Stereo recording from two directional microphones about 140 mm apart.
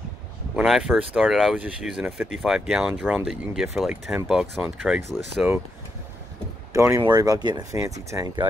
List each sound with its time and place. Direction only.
0.6 s speech: 5° right (ahead or behind)
6.7 s speech: 20° right (ahead or behind)